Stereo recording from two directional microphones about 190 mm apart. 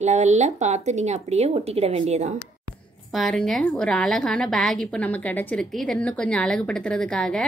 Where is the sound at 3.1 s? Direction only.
Centre (ahead or behind).